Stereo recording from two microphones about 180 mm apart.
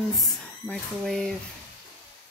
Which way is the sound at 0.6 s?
5° left (ahead or behind).